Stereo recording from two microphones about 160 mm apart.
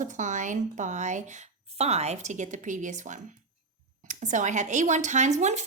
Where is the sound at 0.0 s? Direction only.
50° right (ahead or behind).